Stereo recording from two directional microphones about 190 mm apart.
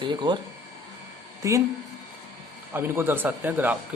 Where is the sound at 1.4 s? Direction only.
15° right (ahead or behind).